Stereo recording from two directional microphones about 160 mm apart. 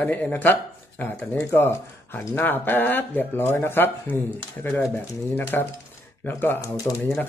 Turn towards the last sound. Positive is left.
turn(degrees=15)  # may be behind; listen again after turning